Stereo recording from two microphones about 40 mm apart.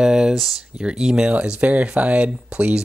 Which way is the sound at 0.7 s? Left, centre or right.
Right.